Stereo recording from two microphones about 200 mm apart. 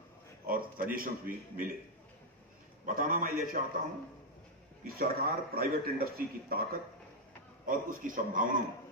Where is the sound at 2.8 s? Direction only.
45° right (ahead or behind).